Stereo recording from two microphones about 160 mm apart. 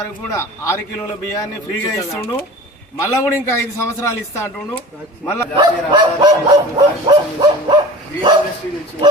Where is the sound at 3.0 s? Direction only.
15° left (ahead or behind).